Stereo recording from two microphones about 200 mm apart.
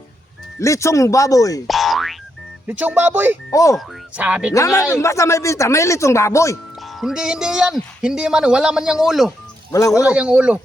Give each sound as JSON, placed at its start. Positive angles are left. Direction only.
{"t": 0.6, "sound": "speech", "side_deg": 15}
{"t": 1.6, "sound": "boing", "side_deg": 0}
{"t": 2.6, "sound": "speech", "side_deg": -10}
{"t": 3.5, "sound": "speech", "side_deg": 15}
{"t": 3.8, "sound": "speech", "side_deg": -5}
{"t": 4.5, "sound": "speech", "side_deg": 15}
{"t": 6.8, "sound": "speech", "side_deg": 0}
{"t": 9.7, "sound": "speech", "side_deg": 15}
{"t": 10.1, "sound": "speech", "side_deg": -5}